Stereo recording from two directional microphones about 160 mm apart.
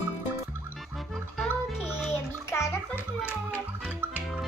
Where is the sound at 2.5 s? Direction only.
15° left (ahead or behind).